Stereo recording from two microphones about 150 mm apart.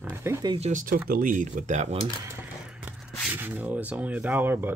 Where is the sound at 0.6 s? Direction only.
60° right (ahead or behind).